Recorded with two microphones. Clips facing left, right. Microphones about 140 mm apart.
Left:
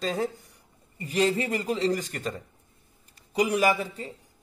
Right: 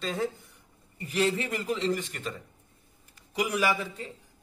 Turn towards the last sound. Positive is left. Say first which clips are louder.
# left 4 dB
turn(degrees=35)  # may be behind; listen again after turning